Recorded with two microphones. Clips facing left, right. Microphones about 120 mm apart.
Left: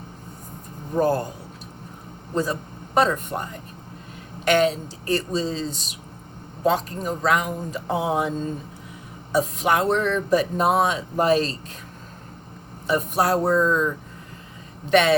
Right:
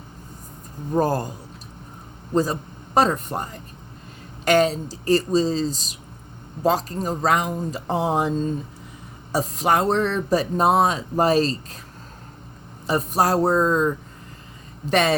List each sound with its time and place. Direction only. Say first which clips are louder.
0.9 s speech: even; 40° right (ahead or behind)
2.3 s speech: right 3 dB; 35° right (ahead or behind)
9.3 s speech: even; 40° right (ahead or behind)
12.9 s speech: right 1 dB; 40° right (ahead or behind)